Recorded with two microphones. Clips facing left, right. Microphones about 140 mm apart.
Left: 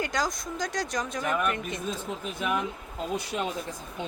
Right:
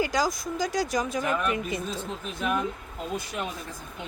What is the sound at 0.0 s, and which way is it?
Speech, 5° right (ahead or behind).